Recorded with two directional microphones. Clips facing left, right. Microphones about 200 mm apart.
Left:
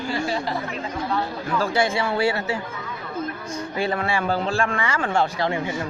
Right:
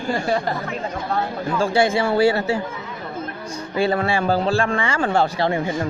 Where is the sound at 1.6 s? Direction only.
30° right (ahead or behind).